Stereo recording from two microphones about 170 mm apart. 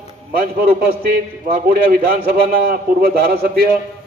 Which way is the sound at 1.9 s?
55° right (ahead or behind).